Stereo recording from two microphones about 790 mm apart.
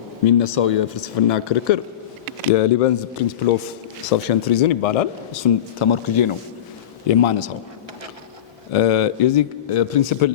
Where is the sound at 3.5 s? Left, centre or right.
Left.